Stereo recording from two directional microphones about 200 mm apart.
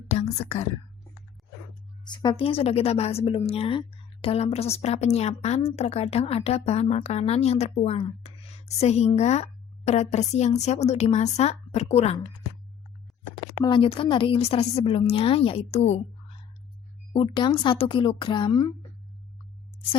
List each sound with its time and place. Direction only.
0.1 s a woman's voice: 30° left (ahead or behind)
2.0 s a woman's voice: 20° left (ahead or behind)
13.7 s a woman's voice: 25° left (ahead or behind)
17.1 s a woman's voice: 25° left (ahead or behind)